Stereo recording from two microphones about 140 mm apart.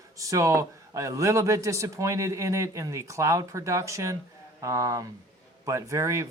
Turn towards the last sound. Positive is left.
turn(degrees=-20)  # may be behind; listen again after turning